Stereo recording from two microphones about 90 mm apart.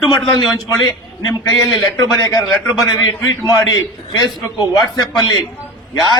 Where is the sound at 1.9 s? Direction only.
40° left (ahead or behind).